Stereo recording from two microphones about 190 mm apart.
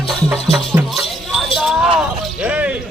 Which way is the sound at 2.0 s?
5° right (ahead or behind).